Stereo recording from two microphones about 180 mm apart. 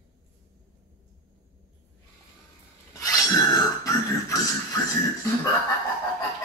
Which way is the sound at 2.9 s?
20° left (ahead or behind).